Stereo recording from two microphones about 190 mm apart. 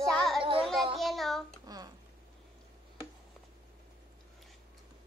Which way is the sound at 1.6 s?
20° right (ahead or behind).